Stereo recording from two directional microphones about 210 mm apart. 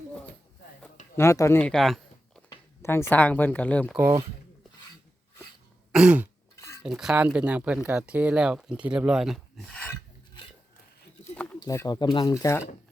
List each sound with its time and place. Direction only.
1.1 s speech: 15° left (ahead or behind)
2.8 s speech: 10° left (ahead or behind)
3.9 s speech: 15° right (ahead or behind)
5.9 s throat clearing: 5° right (ahead or behind)
6.8 s speech: 5° right (ahead or behind)
11.6 s speech: 15° left (ahead or behind)